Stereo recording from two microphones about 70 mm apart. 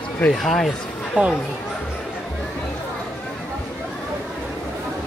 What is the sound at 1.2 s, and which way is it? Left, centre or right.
Speech, centre.